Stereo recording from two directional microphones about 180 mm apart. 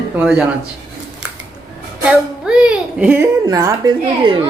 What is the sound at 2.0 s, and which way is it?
Speech, 5° right (ahead or behind).